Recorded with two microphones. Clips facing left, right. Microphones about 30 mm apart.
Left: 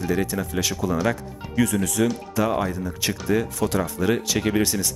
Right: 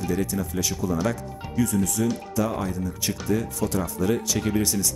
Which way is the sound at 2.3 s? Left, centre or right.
Left.